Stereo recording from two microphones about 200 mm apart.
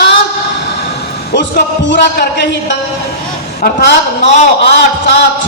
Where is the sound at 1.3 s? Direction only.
60° left (ahead or behind).